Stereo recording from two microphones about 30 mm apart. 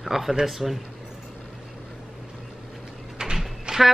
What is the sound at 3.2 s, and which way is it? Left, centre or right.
Door, right.